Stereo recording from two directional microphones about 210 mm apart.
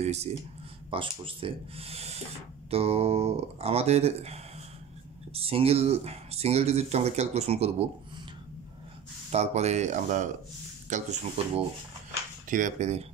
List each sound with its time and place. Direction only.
0.0 s speech: 30° right (ahead or behind)
9.3 s speech: 30° right (ahead or behind)